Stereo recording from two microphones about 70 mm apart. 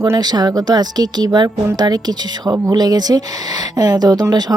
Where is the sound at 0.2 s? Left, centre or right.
Right.